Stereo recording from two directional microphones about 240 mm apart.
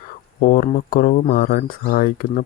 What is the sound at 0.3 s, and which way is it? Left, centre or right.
Speech, left.